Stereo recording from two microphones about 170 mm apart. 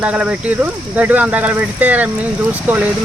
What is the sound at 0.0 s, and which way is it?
Speech, 10° right (ahead or behind).